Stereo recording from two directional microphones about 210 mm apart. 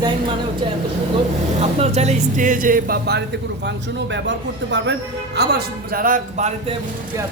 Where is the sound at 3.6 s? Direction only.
55° right (ahead or behind); by 6.7 s 35° right (ahead or behind).